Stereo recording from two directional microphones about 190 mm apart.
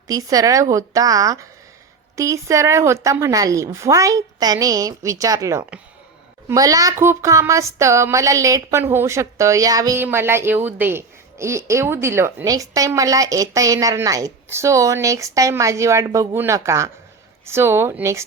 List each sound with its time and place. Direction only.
0.1 s speech: 20° right (ahead or behind)